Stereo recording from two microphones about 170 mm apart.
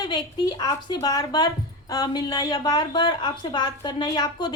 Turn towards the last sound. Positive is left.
turn(degrees=25)  # may be behind; listen again after turning